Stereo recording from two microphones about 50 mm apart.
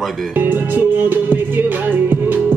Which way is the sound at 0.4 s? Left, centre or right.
Right.